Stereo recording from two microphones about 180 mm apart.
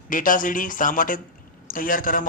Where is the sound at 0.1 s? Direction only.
50° left (ahead or behind).